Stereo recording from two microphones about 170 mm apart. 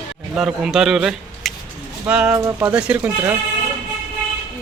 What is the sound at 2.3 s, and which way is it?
A man's voice, 20° right (ahead or behind).